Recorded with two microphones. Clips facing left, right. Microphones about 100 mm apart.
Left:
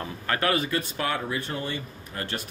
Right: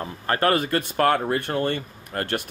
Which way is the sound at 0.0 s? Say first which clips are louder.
Right 4 dB; 40° right (ahead or behind).